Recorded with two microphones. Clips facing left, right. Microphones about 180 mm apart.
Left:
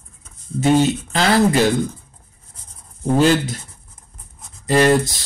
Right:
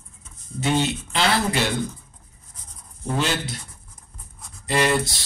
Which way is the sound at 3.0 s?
40° left (ahead or behind).